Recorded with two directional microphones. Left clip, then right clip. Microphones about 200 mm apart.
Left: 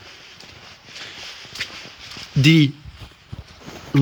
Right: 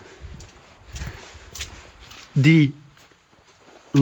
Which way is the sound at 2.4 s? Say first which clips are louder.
Left 2 dB; 20° right (ahead or behind).